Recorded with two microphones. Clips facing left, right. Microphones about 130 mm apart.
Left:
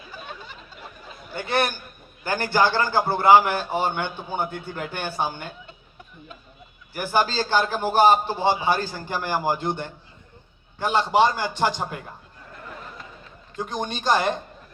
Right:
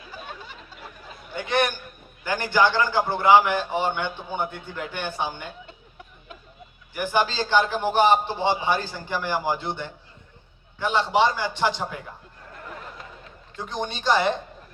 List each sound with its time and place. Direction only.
1.3 s a man's voice: 35° left (ahead or behind)
6.9 s a man's voice: 40° left (ahead or behind)
13.6 s speech: 45° left (ahead or behind)